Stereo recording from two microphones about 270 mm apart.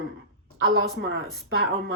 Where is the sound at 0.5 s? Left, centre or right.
Right.